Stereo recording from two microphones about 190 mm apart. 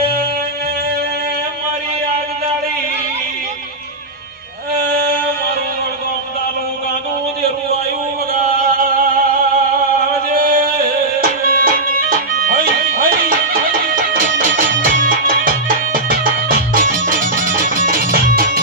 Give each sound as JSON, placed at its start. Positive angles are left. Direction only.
{"t": 8.6, "sound": "music", "side_deg": -45}
{"t": 10.2, "sound": "music", "side_deg": -50}